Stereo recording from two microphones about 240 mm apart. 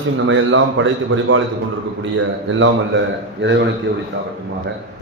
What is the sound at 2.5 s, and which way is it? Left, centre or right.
A man's voice, right.